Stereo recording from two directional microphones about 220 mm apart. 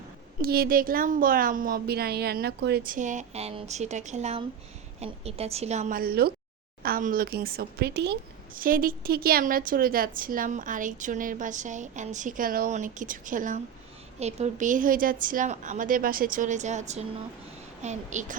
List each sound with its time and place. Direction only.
0.4 s a woman's voice: 45° right (ahead or behind)